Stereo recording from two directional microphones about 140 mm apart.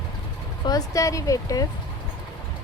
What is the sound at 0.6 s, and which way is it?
Speech, 25° left (ahead or behind).